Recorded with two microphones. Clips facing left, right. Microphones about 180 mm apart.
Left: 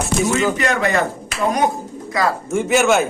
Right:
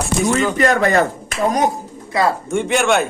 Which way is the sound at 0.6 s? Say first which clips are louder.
Right 4 dB; 45° right (ahead or behind).